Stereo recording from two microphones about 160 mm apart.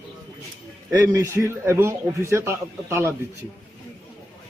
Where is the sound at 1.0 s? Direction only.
15° right (ahead or behind).